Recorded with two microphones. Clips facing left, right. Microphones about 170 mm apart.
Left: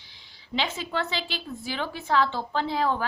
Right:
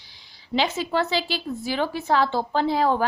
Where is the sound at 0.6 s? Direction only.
40° right (ahead or behind).